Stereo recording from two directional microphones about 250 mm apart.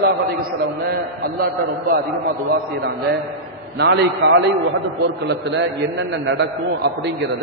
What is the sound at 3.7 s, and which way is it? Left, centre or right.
A man's voice, right.